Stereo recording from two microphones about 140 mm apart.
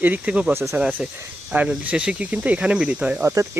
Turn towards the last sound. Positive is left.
turn(degrees=-5)  # may be behind; listen again after turning